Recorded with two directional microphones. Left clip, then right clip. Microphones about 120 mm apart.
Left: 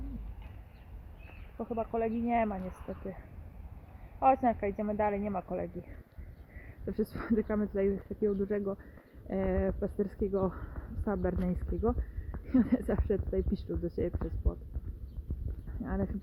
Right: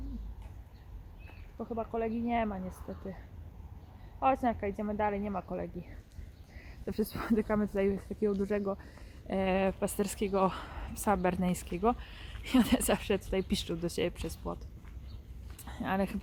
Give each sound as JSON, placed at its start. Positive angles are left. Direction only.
{"t": 1.5, "sound": "speech", "side_deg": 35}
{"t": 4.2, "sound": "speech", "side_deg": 35}
{"t": 6.6, "sound": "a woman's voice", "side_deg": -25}
{"t": 15.9, "sound": "a woman's voice", "side_deg": -40}